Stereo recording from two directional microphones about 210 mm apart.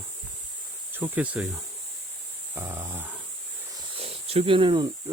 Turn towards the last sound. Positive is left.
turn(degrees=-20)  # may be behind; listen again after turning